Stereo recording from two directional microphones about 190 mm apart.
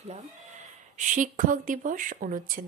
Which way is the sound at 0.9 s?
40° right (ahead or behind).